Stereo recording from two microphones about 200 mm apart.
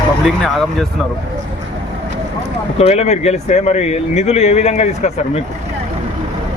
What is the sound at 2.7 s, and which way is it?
Speech, 30° left (ahead or behind).